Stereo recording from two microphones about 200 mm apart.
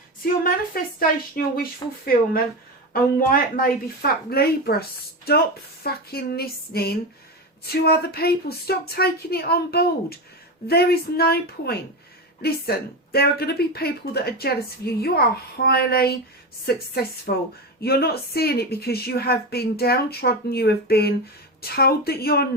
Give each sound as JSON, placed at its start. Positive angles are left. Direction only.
{"t": 0.4, "sound": "speech", "side_deg": 45}
{"t": 2.9, "sound": "speech", "side_deg": 45}